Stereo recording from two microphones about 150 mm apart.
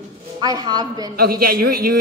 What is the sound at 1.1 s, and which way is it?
Speech, 90° right.